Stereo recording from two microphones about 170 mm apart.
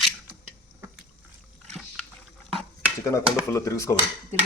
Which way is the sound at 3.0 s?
15° left (ahead or behind).